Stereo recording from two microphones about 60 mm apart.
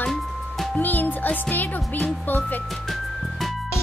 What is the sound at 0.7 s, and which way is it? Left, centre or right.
Speech, left.